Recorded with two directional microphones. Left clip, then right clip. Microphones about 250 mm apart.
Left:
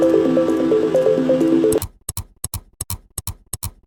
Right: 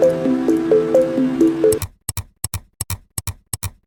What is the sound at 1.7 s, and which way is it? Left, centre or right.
Tick-tock, centre.